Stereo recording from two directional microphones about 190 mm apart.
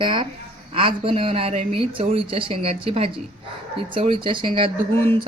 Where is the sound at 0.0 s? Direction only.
25° right (ahead or behind).